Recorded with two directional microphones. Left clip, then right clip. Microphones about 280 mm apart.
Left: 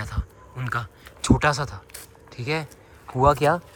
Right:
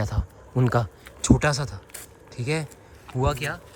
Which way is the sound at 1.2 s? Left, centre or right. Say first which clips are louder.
Left 1 dB; centre.